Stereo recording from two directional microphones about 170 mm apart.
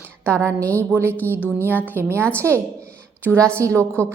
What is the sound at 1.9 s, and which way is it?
A woman's voice, 15° right (ahead or behind).